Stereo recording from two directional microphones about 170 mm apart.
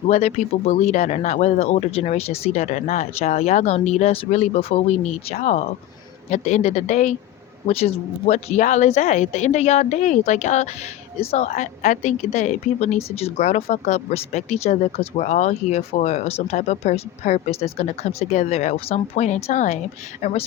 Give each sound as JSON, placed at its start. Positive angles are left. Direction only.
{"t": 0.1, "sound": "a woman's voice", "side_deg": 40}